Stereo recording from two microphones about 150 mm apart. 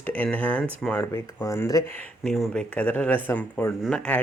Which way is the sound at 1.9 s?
50° right (ahead or behind).